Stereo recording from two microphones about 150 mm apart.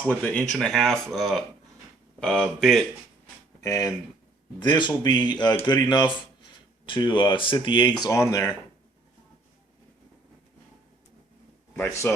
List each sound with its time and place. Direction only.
0.1 s speech: 10° left (ahead or behind)
3.6 s speech: 20° left (ahead or behind)
8.0 s speech: 20° left (ahead or behind)
12.1 s a man's voice: 15° left (ahead or behind)